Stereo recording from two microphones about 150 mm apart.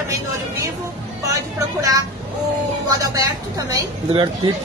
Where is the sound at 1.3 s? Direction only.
25° right (ahead or behind).